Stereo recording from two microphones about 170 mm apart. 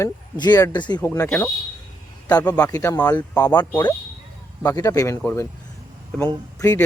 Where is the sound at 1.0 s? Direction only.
15° left (ahead or behind).